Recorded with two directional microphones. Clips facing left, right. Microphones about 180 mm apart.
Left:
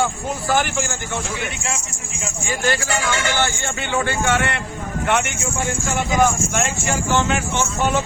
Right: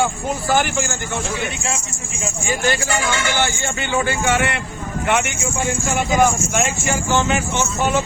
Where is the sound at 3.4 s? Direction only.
5° right (ahead or behind).